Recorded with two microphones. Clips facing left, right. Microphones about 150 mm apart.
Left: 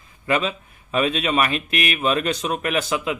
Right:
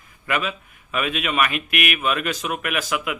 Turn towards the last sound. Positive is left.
turn(degrees=30)  # may be behind; listen again after turning